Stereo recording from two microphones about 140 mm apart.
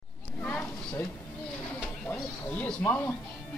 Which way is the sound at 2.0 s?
10° left (ahead or behind).